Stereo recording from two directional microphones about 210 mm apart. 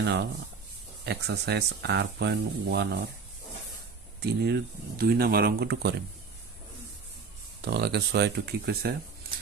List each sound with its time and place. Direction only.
0.0 s speech: 50° right (ahead or behind)
4.2 s speech: 50° right (ahead or behind)
7.6 s speech: 50° right (ahead or behind)